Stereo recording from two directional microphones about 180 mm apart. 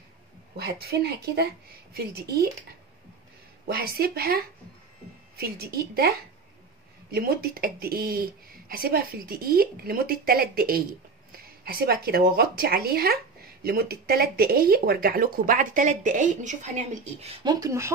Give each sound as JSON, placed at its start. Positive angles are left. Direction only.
{"t": 0.6, "sound": "speech", "side_deg": -60}
{"t": 3.6, "sound": "speech", "side_deg": -60}
{"t": 17.4, "sound": "speech", "side_deg": -20}